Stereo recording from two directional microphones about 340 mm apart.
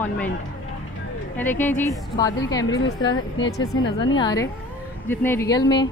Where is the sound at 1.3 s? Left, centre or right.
Centre.